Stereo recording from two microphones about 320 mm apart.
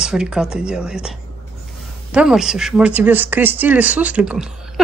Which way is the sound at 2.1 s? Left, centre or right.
Centre.